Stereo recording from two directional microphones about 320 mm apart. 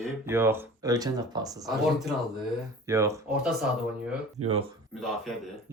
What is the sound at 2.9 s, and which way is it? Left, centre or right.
Speech, centre.